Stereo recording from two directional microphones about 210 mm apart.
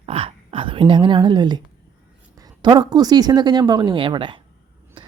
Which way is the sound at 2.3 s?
20° right (ahead or behind).